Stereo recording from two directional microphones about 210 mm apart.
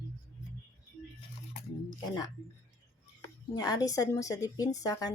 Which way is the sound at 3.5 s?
20° left (ahead or behind).